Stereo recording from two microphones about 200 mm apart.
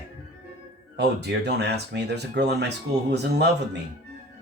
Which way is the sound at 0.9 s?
55° right (ahead or behind).